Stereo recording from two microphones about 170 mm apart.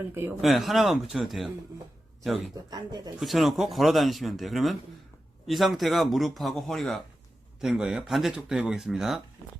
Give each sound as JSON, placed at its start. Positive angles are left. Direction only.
{"t": 0.1, "sound": "speech", "side_deg": -15}
{"t": 0.4, "sound": "speech", "side_deg": 0}
{"t": 2.6, "sound": "speech", "side_deg": -25}
{"t": 3.2, "sound": "speech", "side_deg": 0}